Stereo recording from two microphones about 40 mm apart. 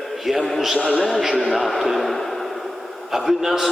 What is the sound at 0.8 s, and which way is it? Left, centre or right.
Speech, right.